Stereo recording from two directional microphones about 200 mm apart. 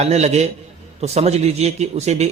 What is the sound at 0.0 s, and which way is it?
Speech, 35° right (ahead or behind).